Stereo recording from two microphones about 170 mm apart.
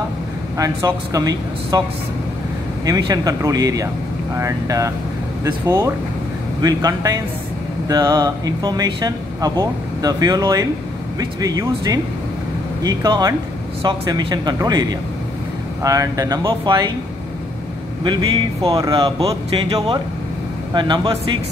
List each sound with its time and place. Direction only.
0.6 s speech: 25° right (ahead or behind)
2.8 s speech: 20° right (ahead or behind)
18.0 s speech: 30° right (ahead or behind)
18.9 s speech: 35° right (ahead or behind)